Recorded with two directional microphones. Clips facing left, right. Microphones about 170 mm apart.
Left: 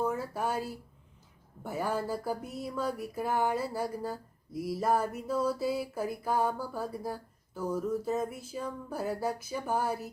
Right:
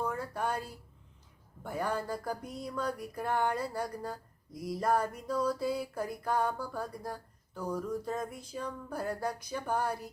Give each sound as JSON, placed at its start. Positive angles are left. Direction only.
{"t": 0.0, "sound": "speech", "side_deg": 5}